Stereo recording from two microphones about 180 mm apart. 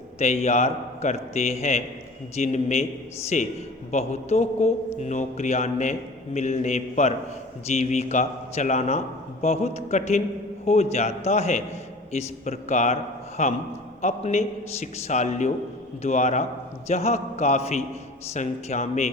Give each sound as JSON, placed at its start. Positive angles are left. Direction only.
{"t": 0.2, "sound": "a man's voice", "side_deg": 35}